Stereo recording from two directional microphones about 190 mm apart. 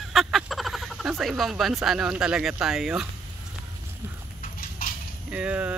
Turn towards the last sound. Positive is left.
turn(degrees=-5)  # may be behind; listen again after turning